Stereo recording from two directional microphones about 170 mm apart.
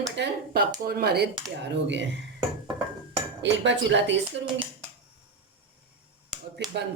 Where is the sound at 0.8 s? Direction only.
65° right (ahead or behind).